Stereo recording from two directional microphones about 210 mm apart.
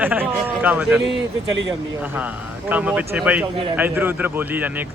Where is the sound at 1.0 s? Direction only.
60° right (ahead or behind).